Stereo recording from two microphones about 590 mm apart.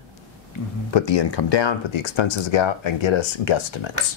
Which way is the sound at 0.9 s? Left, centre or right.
Left.